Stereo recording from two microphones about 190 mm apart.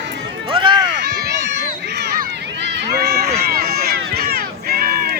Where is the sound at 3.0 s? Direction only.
55° right (ahead or behind).